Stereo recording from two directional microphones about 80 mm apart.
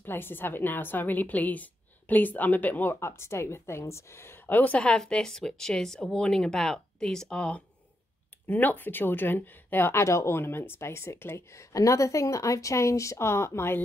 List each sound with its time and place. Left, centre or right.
0.0 s a woman's voice: left